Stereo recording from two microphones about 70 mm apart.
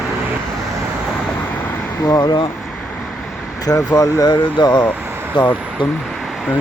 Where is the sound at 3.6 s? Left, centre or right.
Left.